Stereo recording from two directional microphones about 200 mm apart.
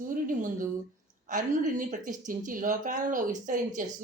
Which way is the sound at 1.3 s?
40° right (ahead or behind).